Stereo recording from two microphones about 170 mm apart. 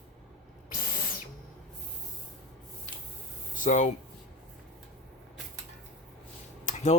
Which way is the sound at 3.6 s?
45° left (ahead or behind).